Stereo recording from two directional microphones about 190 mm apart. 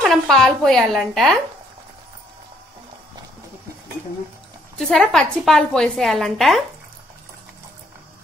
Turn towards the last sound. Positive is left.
turn(degrees=0)  # may be behind; listen again after turning